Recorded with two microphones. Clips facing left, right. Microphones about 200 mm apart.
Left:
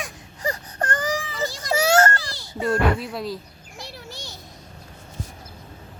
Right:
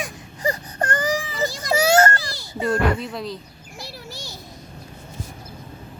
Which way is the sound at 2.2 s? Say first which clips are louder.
Right 1 dB; 10° right (ahead or behind).